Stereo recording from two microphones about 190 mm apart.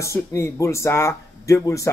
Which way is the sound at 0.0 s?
15° left (ahead or behind).